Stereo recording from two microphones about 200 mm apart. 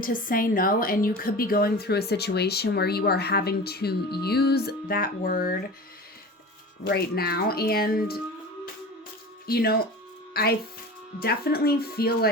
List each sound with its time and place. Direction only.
0.0 s a woman's voice: 45° left (ahead or behind)
6.8 s a woman's voice: 50° left (ahead or behind)
9.5 s a woman's voice: 50° left (ahead or behind)